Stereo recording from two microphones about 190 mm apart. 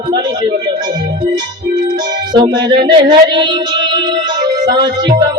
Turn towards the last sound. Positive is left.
turn(degrees=-25)  # may be behind; listen again after turning